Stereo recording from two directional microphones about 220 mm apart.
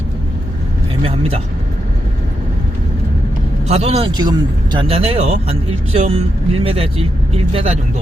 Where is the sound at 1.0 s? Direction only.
25° right (ahead or behind).